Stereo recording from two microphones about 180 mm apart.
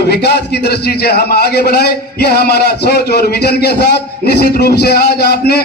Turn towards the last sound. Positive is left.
turn(degrees=60)  # may be behind; listen again after turning